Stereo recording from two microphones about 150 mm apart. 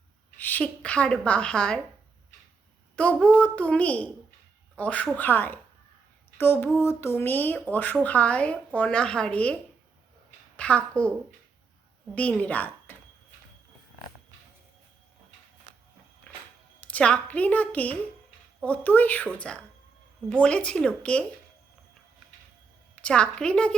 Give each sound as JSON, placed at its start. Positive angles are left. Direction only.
{"t": 0.3, "sound": "speech", "side_deg": 10}
{"t": 2.9, "sound": "speech", "side_deg": 10}
{"t": 6.3, "sound": "a sound", "side_deg": 15}
{"t": 6.7, "sound": "speech", "side_deg": 15}
{"t": 10.6, "sound": "speech", "side_deg": 10}
{"t": 12.1, "sound": "speech", "side_deg": 10}
{"t": 16.3, "sound": "music", "side_deg": 5}
{"t": 16.8, "sound": "speech", "side_deg": 10}
{"t": 23.0, "sound": "speech", "side_deg": 5}